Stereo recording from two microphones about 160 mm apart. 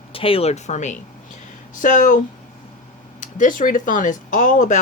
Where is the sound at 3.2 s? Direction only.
55° left (ahead or behind).